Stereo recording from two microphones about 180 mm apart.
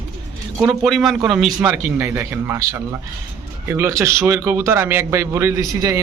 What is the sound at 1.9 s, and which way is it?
A man's voice, 15° right (ahead or behind).